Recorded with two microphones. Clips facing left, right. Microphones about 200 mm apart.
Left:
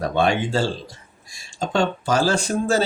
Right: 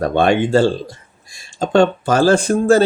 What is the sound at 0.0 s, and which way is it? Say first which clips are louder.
Speech: right 6 dB; 55° right (ahead or behind).